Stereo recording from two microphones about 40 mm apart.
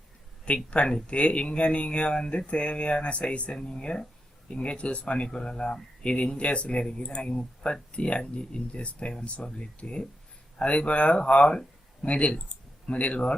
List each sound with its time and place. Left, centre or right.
0.4 s speech: left